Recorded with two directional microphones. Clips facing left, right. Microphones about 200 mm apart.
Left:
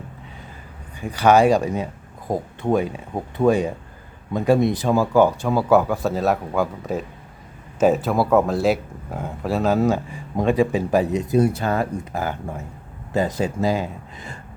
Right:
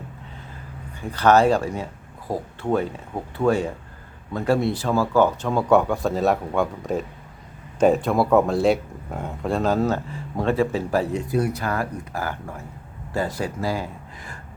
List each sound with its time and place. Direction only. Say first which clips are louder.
1.0 s speech: left 2 dB; 10° left (ahead or behind)